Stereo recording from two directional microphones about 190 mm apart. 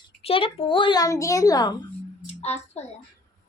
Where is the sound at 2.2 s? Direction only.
35° left (ahead or behind).